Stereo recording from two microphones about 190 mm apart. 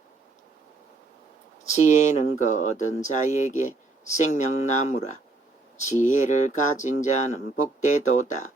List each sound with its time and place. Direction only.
1.7 s speech: 40° left (ahead or behind)